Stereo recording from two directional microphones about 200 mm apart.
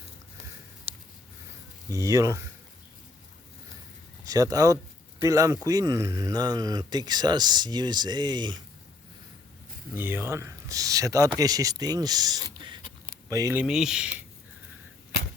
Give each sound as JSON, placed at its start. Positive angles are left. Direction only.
{"t": 1.9, "sound": "speech", "side_deg": -15}
{"t": 4.3, "sound": "speech", "side_deg": -15}
{"t": 9.9, "sound": "speech", "side_deg": -10}